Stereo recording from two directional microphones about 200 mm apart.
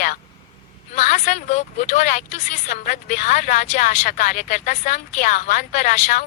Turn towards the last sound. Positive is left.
turn(degrees=40)  # may be behind; listen again after turning